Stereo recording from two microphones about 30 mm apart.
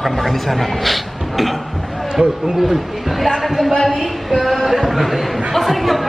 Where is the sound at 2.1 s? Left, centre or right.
Centre.